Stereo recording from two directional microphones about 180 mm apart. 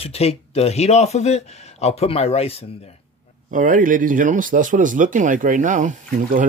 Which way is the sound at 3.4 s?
50° right (ahead or behind).